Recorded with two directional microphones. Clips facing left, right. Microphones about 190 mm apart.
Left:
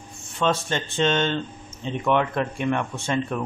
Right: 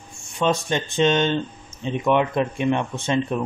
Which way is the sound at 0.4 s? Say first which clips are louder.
Right 2 dB; 15° right (ahead or behind).